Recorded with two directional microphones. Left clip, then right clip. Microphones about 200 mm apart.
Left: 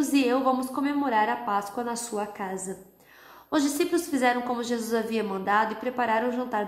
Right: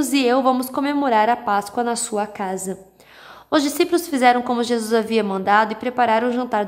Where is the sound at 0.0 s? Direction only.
35° right (ahead or behind).